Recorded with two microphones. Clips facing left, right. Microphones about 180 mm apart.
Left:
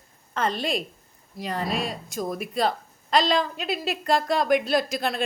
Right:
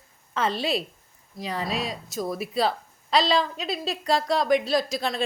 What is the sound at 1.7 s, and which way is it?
Speech, 50° left (ahead or behind).